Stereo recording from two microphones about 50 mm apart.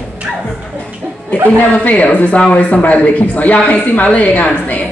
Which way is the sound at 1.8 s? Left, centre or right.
Left.